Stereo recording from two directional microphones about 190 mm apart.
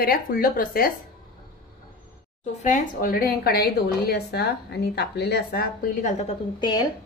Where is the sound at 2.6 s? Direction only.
40° left (ahead or behind).